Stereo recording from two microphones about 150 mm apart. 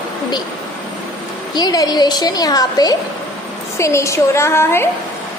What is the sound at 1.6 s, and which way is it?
A woman's voice, 25° left (ahead or behind).